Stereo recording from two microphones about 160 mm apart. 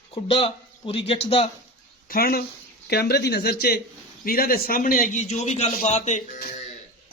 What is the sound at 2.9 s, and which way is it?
A man's voice, 90° left.